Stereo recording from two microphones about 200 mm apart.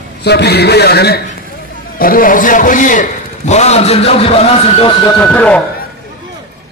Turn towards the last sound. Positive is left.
turn(degrees=5)  # may be behind; listen again after turning